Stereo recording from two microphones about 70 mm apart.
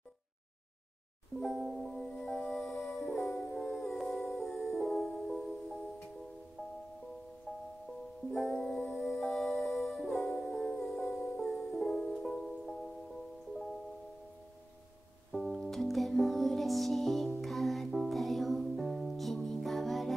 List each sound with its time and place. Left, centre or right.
1.4 s music: centre
7.5 s music: centre
8.3 s music: centre
15.3 s music: centre